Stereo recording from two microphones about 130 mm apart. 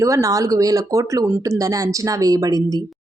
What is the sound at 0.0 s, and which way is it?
Speech, 25° right (ahead or behind).